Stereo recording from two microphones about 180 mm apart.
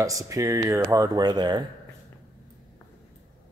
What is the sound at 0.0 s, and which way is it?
Speech, 20° right (ahead or behind).